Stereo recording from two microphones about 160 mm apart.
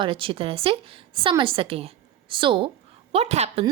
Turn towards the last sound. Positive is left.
turn(degrees=-40)  # may be behind; listen again after turning